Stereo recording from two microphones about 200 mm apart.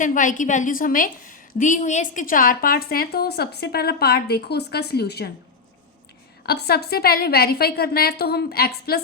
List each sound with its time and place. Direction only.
0.0 s a woman's voice: 40° left (ahead or behind)
6.4 s a woman's voice: 55° left (ahead or behind)